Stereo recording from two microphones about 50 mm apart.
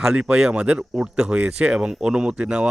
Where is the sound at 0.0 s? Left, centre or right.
Centre.